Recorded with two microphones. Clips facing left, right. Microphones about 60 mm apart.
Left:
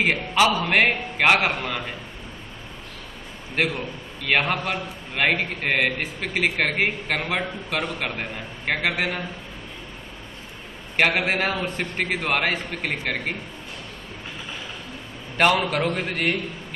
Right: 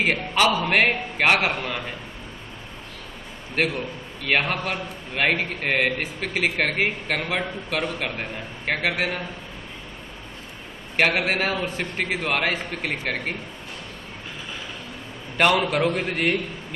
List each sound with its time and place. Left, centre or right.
0.0 s a man's voice: centre
3.5 s a man's voice: centre
11.0 s a man's voice: centre
15.3 s a man's voice: centre